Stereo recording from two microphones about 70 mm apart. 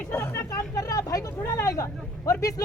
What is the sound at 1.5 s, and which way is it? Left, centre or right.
Speech, left.